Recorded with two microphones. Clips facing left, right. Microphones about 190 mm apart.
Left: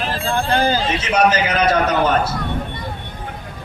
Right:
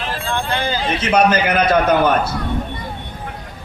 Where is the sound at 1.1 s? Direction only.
55° right (ahead or behind).